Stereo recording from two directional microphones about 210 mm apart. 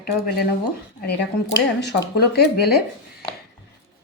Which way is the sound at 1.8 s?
50° left (ahead or behind).